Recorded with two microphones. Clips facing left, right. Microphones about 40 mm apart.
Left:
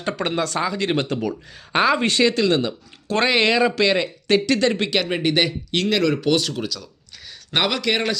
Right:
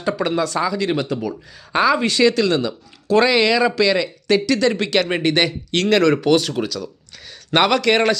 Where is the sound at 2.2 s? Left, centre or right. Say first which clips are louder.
Right 3 dB; left.